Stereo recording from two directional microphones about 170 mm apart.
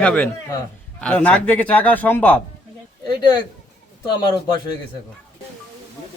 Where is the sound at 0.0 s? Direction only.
5° left (ahead or behind).